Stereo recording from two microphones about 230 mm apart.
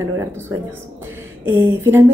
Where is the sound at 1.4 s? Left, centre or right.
Centre.